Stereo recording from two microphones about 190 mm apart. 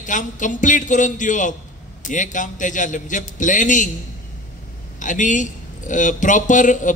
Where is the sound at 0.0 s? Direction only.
40° left (ahead or behind).